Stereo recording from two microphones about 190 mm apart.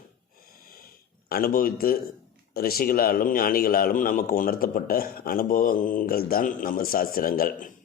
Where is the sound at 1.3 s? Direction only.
50° left (ahead or behind).